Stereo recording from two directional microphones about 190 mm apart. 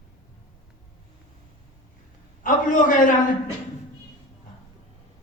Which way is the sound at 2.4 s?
45° left (ahead or behind).